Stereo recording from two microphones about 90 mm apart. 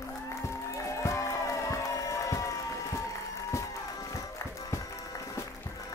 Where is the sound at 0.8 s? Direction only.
35° left (ahead or behind).